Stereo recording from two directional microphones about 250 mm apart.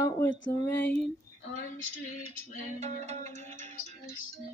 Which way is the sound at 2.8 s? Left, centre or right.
Right.